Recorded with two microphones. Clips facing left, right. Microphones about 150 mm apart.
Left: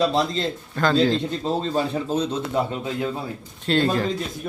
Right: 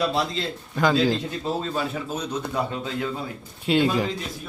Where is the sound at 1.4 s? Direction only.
30° left (ahead or behind).